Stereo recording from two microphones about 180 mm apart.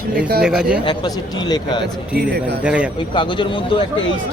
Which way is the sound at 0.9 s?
20° left (ahead or behind).